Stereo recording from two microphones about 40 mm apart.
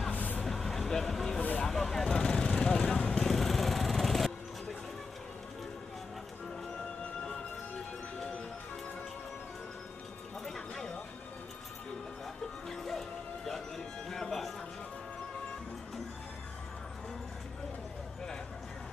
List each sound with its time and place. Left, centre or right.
0.1 s vehicle: left
0.4 s vehicle: centre; by 3.3 s left
3.3 s vehicle: centre
12.6 s music: centre